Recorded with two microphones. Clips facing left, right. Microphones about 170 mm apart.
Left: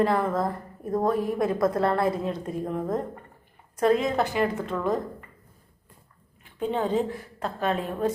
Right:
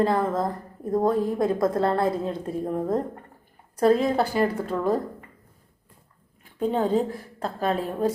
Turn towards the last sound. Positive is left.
turn(degrees=-35)  # may be behind; listen again after turning